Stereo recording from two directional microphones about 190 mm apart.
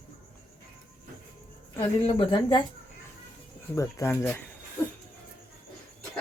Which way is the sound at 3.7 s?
15° left (ahead or behind).